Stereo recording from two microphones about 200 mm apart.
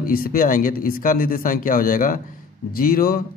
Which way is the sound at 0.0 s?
45° left (ahead or behind).